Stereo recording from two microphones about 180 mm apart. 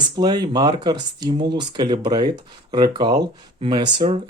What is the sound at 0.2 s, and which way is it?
Speech, 20° right (ahead or behind).